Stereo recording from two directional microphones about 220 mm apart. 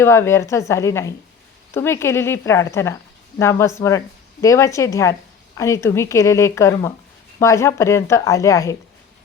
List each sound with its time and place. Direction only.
0.0 s speech: 10° left (ahead or behind)